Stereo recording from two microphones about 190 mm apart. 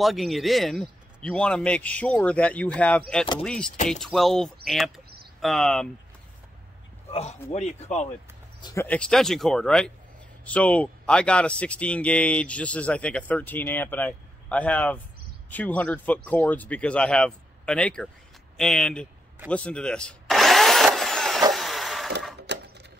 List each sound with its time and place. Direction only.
0.0 s a man's voice: centre (ahead or behind)
7.1 s speech: 35° left (ahead or behind)
8.5 s speech: 20° left (ahead or behind)
8.8 s a man's voice: 5° left (ahead or behind)
19.5 s a sound: 5° left (ahead or behind)
21.5 s vehicle: centre (ahead or behind)
22.5 s sewing machine: 65° right (ahead or behind)